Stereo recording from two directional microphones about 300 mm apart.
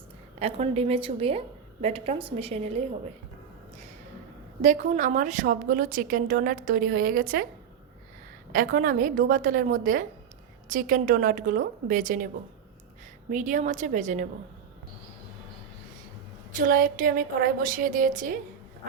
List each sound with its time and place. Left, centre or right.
0.3 s a woman's voice: centre
4.6 s a woman's voice: right
8.5 s a woman's voice: right
13.3 s a woman's voice: right
16.5 s a woman's voice: right